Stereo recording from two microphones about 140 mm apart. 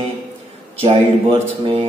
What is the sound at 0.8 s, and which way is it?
A man's voice, 40° right (ahead or behind).